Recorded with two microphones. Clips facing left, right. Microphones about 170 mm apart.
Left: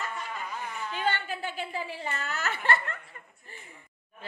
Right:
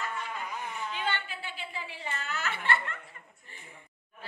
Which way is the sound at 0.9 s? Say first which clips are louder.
Left 7 dB; 40° left (ahead or behind).